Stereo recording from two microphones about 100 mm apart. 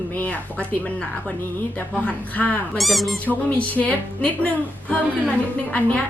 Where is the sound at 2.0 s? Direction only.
15° left (ahead or behind).